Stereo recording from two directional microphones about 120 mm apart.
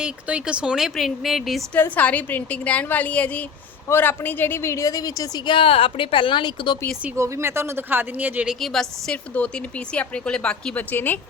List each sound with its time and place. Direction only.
0.0 s speech: 10° right (ahead or behind)
1.7 s a woman's voice: 15° left (ahead or behind); by 5.4 s 30° left (ahead or behind)
5.5 s speech: 45° left (ahead or behind)
7.2 s speech: 25° right (ahead or behind)
8.6 s a woman's voice: 5° left (ahead or behind)